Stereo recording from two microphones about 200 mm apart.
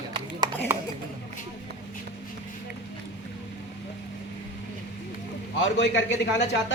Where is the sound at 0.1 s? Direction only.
20° right (ahead or behind).